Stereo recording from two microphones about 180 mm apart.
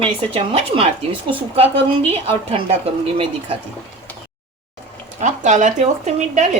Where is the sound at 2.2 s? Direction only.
30° right (ahead or behind).